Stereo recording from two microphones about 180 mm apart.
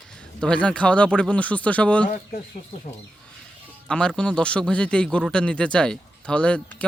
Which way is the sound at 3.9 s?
5° left (ahead or behind).